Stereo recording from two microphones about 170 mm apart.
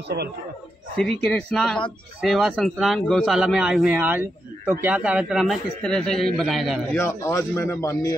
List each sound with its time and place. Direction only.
0.9 s speech: 5° left (ahead or behind)
7.0 s speech: 15° left (ahead or behind)